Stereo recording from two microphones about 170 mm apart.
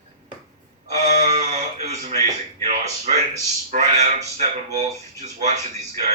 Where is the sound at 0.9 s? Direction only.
40° right (ahead or behind).